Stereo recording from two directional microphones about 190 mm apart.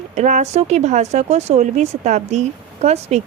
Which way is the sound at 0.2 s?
40° right (ahead or behind).